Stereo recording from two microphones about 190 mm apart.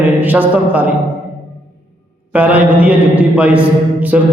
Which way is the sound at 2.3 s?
5° right (ahead or behind).